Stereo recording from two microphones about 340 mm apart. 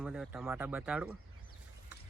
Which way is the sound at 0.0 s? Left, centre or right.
Centre.